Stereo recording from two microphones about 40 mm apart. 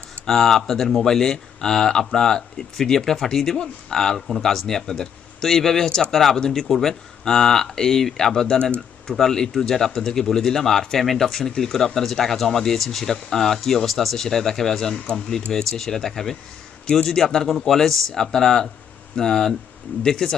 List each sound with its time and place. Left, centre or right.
0.3 s speech: centre